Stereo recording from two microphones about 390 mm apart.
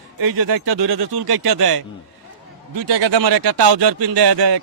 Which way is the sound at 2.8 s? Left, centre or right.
Right.